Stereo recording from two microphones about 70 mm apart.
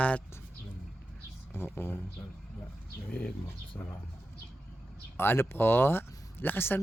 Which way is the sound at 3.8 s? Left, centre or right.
Left.